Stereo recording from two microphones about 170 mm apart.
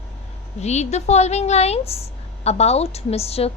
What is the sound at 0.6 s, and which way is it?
A woman's voice, 40° left (ahead or behind).